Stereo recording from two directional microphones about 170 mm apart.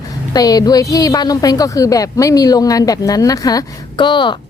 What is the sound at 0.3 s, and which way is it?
A woman's voice, 20° left (ahead or behind).